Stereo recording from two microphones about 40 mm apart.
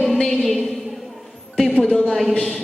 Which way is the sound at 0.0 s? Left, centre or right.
Centre.